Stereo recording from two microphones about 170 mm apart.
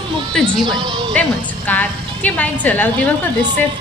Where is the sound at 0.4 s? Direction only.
25° right (ahead or behind).